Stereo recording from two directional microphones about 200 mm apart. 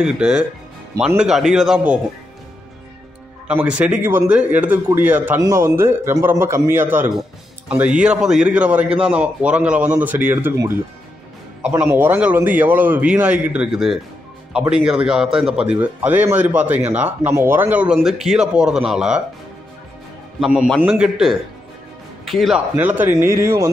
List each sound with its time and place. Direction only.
0.0 s speech: 5° right (ahead or behind)
3.4 s a man's voice: 5° right (ahead or behind)
20.3 s a man's voice: centre (ahead or behind)